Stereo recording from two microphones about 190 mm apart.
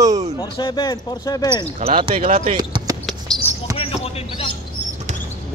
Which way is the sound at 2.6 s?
20° right (ahead or behind).